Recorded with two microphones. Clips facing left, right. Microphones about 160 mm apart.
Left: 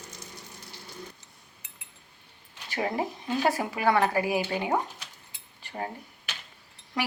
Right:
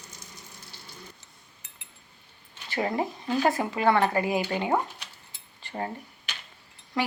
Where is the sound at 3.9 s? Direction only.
10° left (ahead or behind).